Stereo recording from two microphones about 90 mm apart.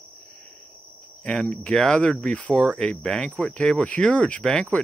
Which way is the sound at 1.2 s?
10° left (ahead or behind).